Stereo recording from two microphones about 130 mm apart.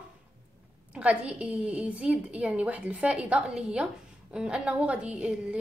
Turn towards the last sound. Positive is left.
turn(degrees=-10)  # may be behind; listen again after turning